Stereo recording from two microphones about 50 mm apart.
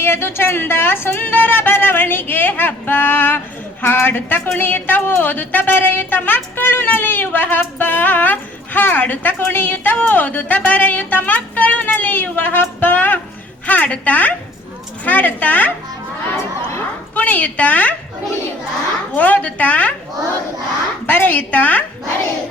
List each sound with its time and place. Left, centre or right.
0.0 s a woman's voice: left
17.2 s a woman's voice: left
19.1 s a woman's voice: left
21.1 s a woman's voice: left